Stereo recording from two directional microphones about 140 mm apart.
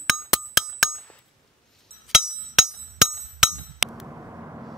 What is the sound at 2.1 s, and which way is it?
Hammer, centre (ahead or behind).